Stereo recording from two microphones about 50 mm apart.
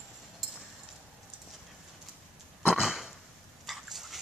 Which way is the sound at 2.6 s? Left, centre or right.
Centre.